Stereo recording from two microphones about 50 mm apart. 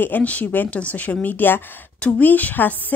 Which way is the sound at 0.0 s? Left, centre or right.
Left.